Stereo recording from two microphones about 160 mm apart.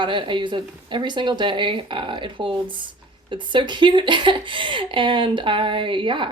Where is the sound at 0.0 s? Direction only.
30° right (ahead or behind).